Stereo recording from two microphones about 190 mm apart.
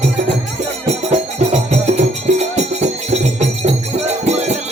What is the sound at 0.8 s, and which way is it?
Music, 35° right (ahead or behind).